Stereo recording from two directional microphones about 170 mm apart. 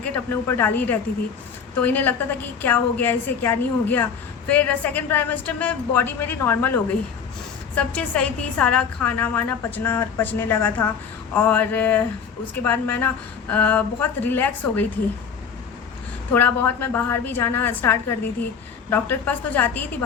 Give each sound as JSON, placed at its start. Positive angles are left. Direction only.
{"t": 0.0, "sound": "a woman's voice", "side_deg": 10}
{"t": 16.3, "sound": "a woman's voice", "side_deg": 10}